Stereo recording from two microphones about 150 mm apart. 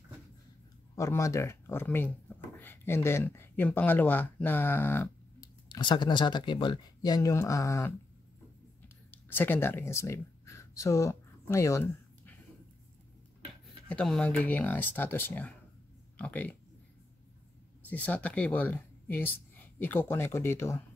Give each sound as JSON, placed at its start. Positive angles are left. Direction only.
{"t": 0.9, "sound": "speech", "side_deg": 20}
{"t": 5.7, "sound": "speech", "side_deg": 30}
{"t": 8.8, "sound": "a sound", "side_deg": 15}
{"t": 13.8, "sound": "speech", "side_deg": 5}
{"t": 17.8, "sound": "speech", "side_deg": 10}